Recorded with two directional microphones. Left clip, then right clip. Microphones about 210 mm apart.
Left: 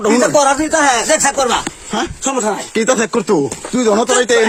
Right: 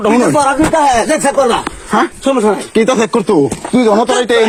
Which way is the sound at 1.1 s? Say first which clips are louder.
Right 3 dB; 25° left (ahead or behind).